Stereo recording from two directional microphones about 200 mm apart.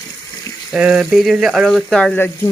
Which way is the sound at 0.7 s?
5° right (ahead or behind).